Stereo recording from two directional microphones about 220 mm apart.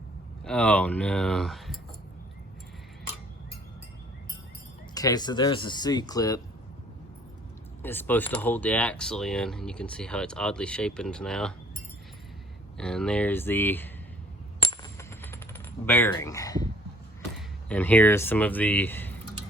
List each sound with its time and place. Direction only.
0.4 s speech: 5° left (ahead or behind)
4.9 s speech: 15° left (ahead or behind)
7.8 s speech: 10° left (ahead or behind)
12.7 s speech: 5° left (ahead or behind)
14.6 s coin: 15° left (ahead or behind)
17.7 s speech: 5° left (ahead or behind)